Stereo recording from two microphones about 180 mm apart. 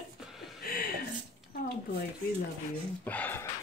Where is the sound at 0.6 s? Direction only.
55° left (ahead or behind).